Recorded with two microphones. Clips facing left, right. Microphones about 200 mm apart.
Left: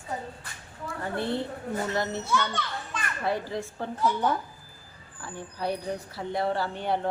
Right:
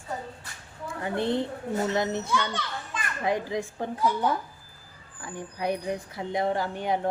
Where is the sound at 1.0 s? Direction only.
20° right (ahead or behind).